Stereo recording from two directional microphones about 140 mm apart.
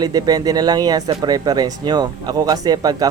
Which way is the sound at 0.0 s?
30° right (ahead or behind).